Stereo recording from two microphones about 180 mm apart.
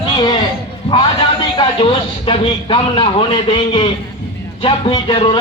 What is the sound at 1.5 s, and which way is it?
Speech, 30° left (ahead or behind).